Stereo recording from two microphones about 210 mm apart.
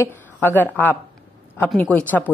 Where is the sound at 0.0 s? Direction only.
10° left (ahead or behind).